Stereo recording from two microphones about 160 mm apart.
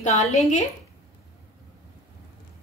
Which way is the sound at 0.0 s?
40° left (ahead or behind).